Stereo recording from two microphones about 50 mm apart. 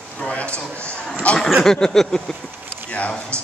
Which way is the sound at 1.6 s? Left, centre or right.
Centre.